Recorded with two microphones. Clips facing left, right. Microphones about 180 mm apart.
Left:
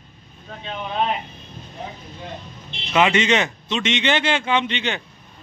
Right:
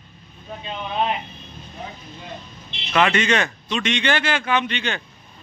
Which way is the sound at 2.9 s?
20° left (ahead or behind).